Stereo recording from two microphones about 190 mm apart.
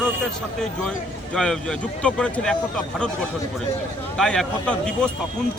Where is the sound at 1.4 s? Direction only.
5° left (ahead or behind).